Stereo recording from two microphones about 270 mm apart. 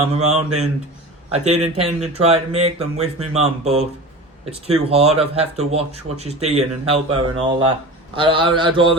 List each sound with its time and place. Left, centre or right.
0.1 s a man's voice: right